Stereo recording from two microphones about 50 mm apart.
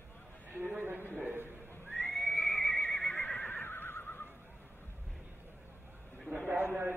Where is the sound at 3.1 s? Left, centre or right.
Left.